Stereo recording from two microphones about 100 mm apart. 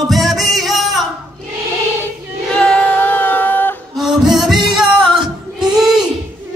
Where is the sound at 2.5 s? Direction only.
10° left (ahead or behind).